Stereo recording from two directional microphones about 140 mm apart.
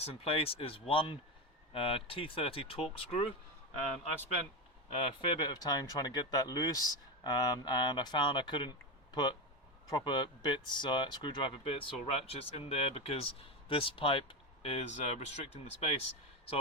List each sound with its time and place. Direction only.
0.0 s speech: 45° left (ahead or behind)
4.9 s speech: 40° left (ahead or behind)
9.9 s speech: 30° left (ahead or behind); by 16.0 s 50° left (ahead or behind)